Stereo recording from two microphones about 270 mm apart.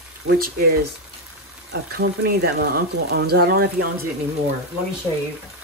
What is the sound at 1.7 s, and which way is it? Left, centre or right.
Speech, right.